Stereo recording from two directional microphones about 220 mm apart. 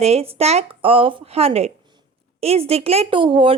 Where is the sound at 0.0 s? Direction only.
25° right (ahead or behind).